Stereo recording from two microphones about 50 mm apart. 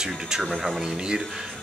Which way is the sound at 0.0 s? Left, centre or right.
Centre.